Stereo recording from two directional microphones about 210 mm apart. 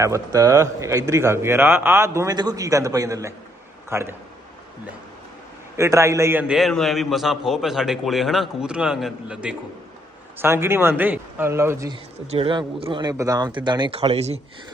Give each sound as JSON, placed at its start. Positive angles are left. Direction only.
{"t": 0.0, "sound": "a man's voice", "side_deg": -15}
{"t": 5.7, "sound": "a man's voice", "side_deg": -15}
{"t": 12.3, "sound": "speech", "side_deg": -25}